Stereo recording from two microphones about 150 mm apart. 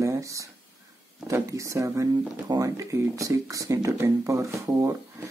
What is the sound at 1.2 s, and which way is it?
Speech, 20° right (ahead or behind).